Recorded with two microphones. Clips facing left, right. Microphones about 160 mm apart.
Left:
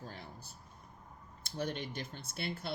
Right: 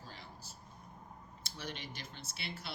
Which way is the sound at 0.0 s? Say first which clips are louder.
Left 5 dB; 55° left (ahead or behind).